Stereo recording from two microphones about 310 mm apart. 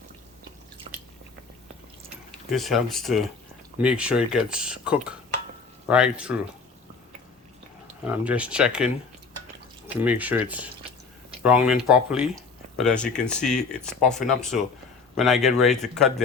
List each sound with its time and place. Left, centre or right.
0.9 s biting: right
2.5 s speech: centre
8.0 s speech: centre
9.9 s speech: centre